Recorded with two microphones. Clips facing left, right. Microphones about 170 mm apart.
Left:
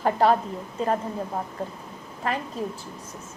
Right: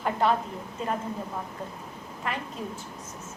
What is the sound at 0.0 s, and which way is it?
Speech, 35° left (ahead or behind).